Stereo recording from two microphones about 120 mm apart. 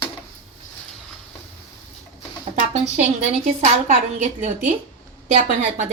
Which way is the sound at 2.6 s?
80° right.